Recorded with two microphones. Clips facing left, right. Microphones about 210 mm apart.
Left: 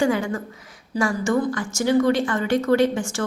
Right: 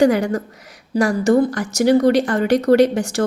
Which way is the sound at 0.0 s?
40° right (ahead or behind).